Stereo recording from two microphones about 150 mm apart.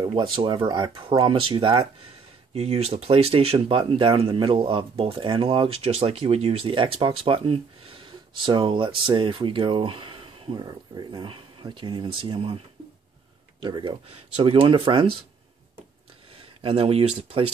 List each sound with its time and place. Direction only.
0.0 s speech: 30° right (ahead or behind)
16.3 s speech: 40° right (ahead or behind)